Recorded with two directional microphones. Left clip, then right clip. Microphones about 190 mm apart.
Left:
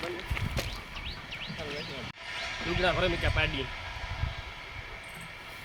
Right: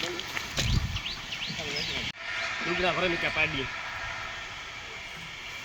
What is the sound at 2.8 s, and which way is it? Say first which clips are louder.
Speech: even; 15° right (ahead or behind).